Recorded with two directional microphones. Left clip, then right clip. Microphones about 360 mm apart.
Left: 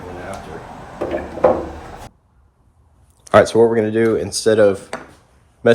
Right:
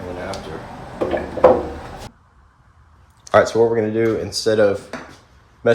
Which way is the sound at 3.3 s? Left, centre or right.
Left.